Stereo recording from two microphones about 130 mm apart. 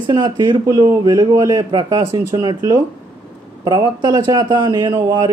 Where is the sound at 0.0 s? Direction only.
35° right (ahead or behind).